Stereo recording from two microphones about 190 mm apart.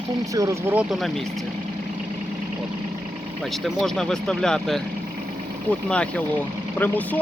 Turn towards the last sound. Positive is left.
turn(degrees=10)  # may be behind; listen again after turning